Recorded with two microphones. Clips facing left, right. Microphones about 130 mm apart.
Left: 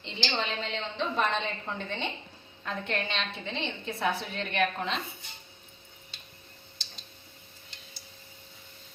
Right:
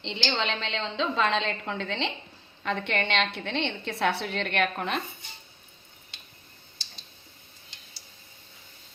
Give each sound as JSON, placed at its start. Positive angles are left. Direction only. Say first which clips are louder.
{"t": 0.0, "sound": "a woman's voice", "louder": "right 3 dB", "side_deg": -80}
{"t": 2.6, "sound": "a woman's voice", "louder": "right 4 dB", "side_deg": -70}